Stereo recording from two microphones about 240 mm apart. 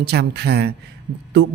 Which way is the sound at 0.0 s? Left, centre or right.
Right.